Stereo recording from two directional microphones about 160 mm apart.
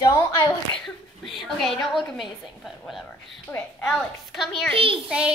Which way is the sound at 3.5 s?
10° left (ahead or behind).